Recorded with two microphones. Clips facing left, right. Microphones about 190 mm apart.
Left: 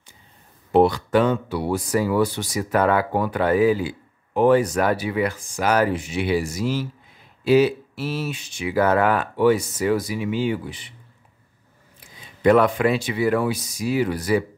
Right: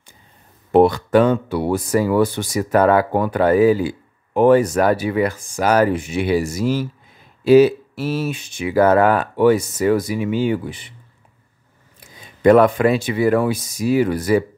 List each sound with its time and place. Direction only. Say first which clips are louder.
0.7 s speech: right 3 dB; 55° right (ahead or behind)
12.4 s speech: right 4 dB; 45° right (ahead or behind)